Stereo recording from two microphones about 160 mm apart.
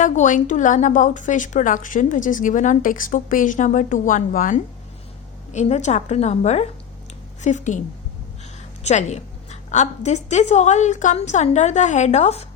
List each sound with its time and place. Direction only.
0.0 s a woman's voice: 55° left (ahead or behind)
8.8 s a woman's voice: 45° left (ahead or behind)